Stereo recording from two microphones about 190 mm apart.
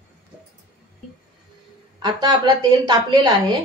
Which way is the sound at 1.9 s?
25° right (ahead or behind).